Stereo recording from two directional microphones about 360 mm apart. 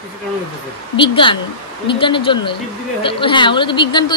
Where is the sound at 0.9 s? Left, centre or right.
Centre.